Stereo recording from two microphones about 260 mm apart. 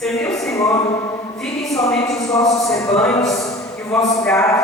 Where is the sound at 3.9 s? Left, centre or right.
Centre.